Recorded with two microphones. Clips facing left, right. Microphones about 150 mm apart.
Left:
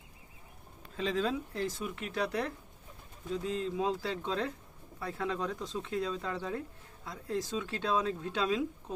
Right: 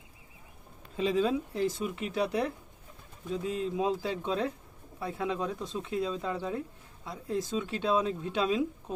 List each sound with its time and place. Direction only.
0.9 s speech: 10° right (ahead or behind)
6.1 s speech: 15° right (ahead or behind)